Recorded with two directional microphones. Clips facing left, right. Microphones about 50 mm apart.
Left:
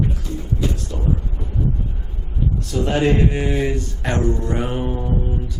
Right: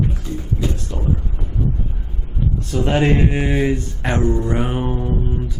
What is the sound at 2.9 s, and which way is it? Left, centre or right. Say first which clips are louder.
Speech: right 1 dB; right.